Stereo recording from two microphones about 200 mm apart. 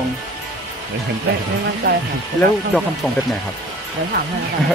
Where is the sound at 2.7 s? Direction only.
10° left (ahead or behind).